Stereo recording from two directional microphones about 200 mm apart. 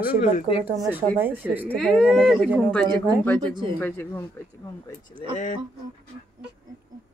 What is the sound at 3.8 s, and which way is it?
Speech, 15° left (ahead or behind).